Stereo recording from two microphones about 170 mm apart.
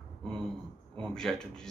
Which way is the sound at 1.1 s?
5° left (ahead or behind).